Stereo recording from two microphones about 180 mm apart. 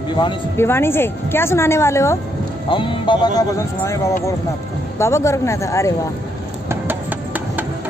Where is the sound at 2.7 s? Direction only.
25° left (ahead or behind).